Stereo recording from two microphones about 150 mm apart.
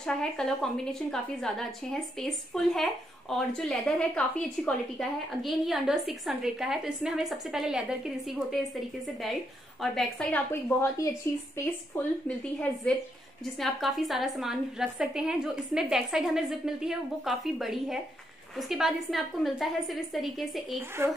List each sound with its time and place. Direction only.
0.0 s a woman's voice: 5° left (ahead or behind)
10.5 s speech: 20° left (ahead or behind)
13.6 s a woman's voice: centre (ahead or behind)